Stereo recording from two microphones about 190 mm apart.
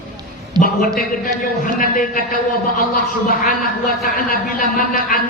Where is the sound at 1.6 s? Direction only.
45° left (ahead or behind).